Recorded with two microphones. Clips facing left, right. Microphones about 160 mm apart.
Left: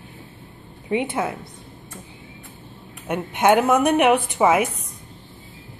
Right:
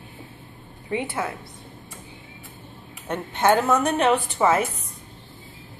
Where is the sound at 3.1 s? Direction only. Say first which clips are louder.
Left 3 dB; 15° left (ahead or behind).